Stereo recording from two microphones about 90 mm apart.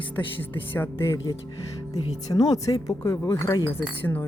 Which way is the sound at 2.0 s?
45° left (ahead or behind).